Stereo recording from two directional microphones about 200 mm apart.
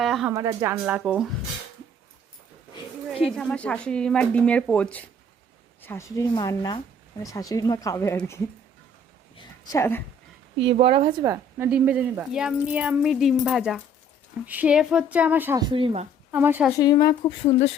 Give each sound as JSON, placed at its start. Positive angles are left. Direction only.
{"t": 0.0, "sound": "a sound", "side_deg": 0}
{"t": 0.3, "sound": "a woman's voice", "side_deg": -15}
{"t": 3.2, "sound": "speech", "side_deg": 0}
{"t": 10.7, "sound": "a woman's voice", "side_deg": -25}
{"t": 11.5, "sound": "a woman's voice", "side_deg": -10}
{"t": 16.3, "sound": "a woman's voice", "side_deg": -10}
{"t": 16.7, "sound": "speech", "side_deg": 20}